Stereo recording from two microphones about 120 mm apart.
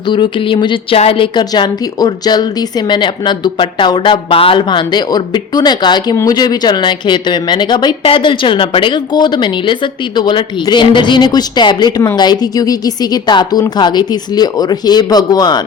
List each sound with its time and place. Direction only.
0.0 s speech: 40° left (ahead or behind)